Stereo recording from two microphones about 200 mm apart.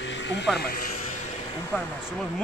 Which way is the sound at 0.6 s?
50° left (ahead or behind).